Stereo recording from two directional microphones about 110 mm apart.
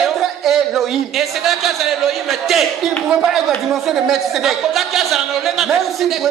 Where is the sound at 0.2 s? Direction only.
Centre (ahead or behind).